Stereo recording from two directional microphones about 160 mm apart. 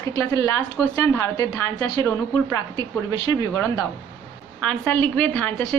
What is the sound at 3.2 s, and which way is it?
Speech, 25° left (ahead or behind).